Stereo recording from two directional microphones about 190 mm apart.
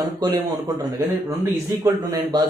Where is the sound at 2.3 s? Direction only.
20° right (ahead or behind).